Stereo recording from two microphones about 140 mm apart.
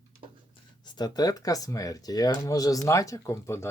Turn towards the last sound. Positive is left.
turn(degrees=20)  # may be behind; listen again after turning